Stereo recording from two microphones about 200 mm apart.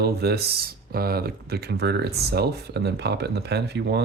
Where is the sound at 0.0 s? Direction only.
50° right (ahead or behind).